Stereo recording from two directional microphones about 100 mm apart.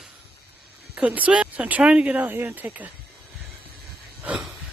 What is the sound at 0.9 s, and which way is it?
Speech, 15° right (ahead or behind).